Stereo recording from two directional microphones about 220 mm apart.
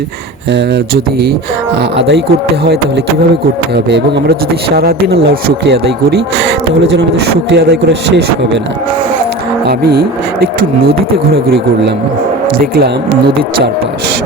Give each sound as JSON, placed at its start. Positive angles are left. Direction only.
{"t": 2.0, "sound": "speech", "side_deg": -50}
{"t": 3.8, "sound": "speech", "side_deg": -50}
{"t": 7.5, "sound": "speech", "side_deg": -50}
{"t": 12.7, "sound": "speech", "side_deg": -45}